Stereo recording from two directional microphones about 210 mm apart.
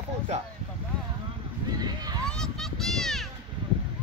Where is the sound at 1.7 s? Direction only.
20° right (ahead or behind).